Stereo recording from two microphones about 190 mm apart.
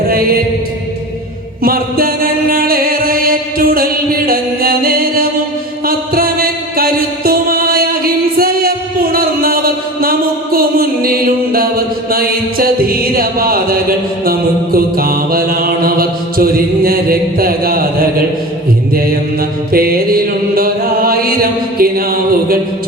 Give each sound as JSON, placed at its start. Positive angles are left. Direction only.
{"t": 0.1, "sound": "mantra", "side_deg": -50}
{"t": 1.6, "sound": "music", "side_deg": -50}
{"t": 14.3, "sound": "mantra", "side_deg": -50}
{"t": 19.7, "sound": "mantra", "side_deg": -50}